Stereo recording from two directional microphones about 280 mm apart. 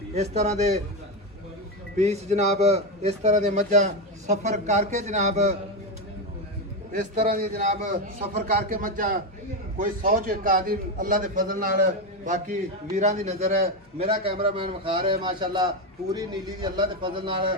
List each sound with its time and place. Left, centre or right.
0.1 s a man's voice: right
2.0 s a man's voice: right
6.9 s a man's voice: right